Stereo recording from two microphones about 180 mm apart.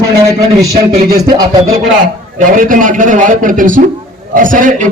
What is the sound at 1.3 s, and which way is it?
Music, 20° right (ahead or behind).